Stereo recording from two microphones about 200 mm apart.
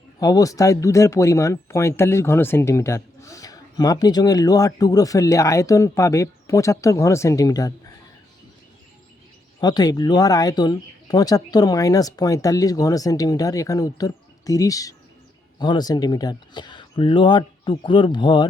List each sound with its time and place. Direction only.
0.2 s speech: 15° left (ahead or behind)
9.6 s speech: 20° left (ahead or behind)